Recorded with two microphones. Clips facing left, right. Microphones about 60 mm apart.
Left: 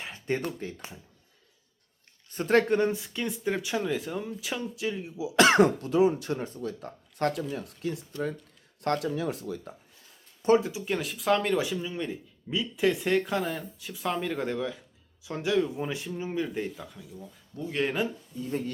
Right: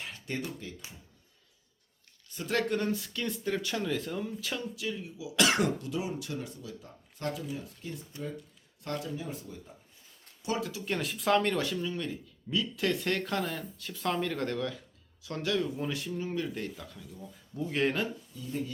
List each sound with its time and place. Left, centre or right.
0.0 s a sound: left
2.3 s speech: left; by 4.7 s centre
4.7 s speech: left
6.6 s speech: left
8.1 s speech: right
8.8 s speech: left
10.4 s speech: left
10.8 s speech: centre
17.3 s speech: centre
18.3 s speech: left